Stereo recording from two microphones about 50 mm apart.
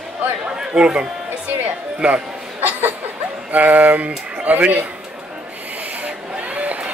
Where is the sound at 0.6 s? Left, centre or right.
Centre.